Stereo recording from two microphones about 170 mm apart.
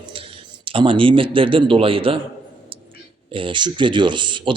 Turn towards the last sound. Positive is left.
turn(degrees=-30)  # may be behind; listen again after turning